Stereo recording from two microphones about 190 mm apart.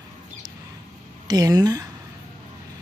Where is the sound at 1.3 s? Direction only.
20° right (ahead or behind).